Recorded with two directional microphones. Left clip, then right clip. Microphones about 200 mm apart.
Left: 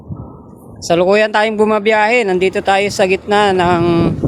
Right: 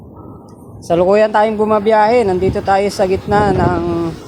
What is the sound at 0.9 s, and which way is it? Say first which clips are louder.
Speech: even; 20° left (ahead or behind).